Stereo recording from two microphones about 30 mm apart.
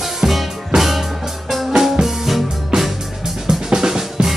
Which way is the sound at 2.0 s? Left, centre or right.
Centre.